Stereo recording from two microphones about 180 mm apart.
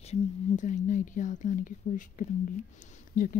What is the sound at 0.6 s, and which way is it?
Speech, 45° left (ahead or behind).